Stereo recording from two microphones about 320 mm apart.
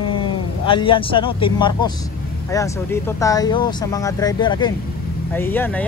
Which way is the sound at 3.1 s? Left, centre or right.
Centre.